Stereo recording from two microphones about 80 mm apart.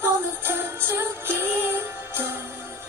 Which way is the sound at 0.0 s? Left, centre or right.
Right.